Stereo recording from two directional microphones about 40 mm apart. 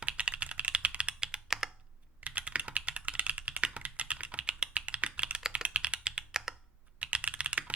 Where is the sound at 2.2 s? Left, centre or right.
Right.